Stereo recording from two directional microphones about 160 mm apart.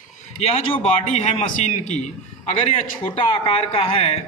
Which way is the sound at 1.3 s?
45° left (ahead or behind).